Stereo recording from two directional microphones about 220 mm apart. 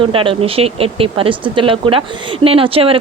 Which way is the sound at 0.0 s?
25° right (ahead or behind).